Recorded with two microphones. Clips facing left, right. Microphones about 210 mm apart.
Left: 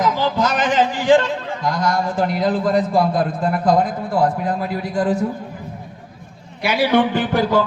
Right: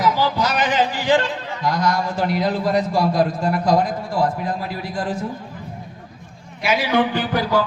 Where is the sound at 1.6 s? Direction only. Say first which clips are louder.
Even; 45° left (ahead or behind).